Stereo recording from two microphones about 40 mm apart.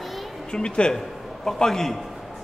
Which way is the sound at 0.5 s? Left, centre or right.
Left.